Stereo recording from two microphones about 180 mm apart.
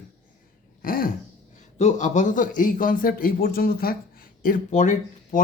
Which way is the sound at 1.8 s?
40° left (ahead or behind).